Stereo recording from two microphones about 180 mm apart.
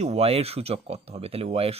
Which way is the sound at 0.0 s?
35° right (ahead or behind).